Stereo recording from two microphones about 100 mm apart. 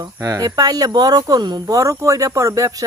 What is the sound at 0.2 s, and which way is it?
Speech, 35° right (ahead or behind).